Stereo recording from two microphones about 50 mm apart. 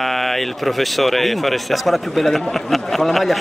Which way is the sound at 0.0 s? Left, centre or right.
Centre.